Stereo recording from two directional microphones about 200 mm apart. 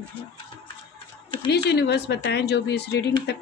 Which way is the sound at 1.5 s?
55° left (ahead or behind).